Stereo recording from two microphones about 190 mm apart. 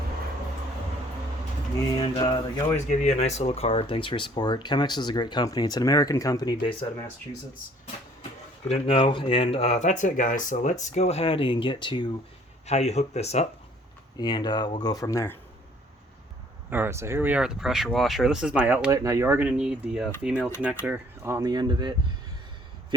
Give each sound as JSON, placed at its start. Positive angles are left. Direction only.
{"t": 2.0, "sound": "speech", "side_deg": 20}
{"t": 2.7, "sound": "speech", "side_deg": 35}
{"t": 8.6, "sound": "speech", "side_deg": 30}
{"t": 14.2, "sound": "speech", "side_deg": 20}
{"t": 16.6, "sound": "speech", "side_deg": -10}
{"t": 20.3, "sound": "speech", "side_deg": 10}
{"t": 20.8, "sound": "speech", "side_deg": -10}